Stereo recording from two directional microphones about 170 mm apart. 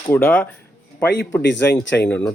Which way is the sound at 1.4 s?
90° left.